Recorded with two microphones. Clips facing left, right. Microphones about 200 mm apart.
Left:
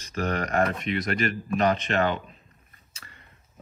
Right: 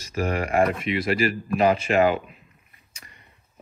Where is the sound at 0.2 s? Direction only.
10° right (ahead or behind).